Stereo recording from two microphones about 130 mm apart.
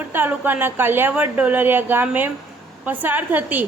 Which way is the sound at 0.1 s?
15° right (ahead or behind).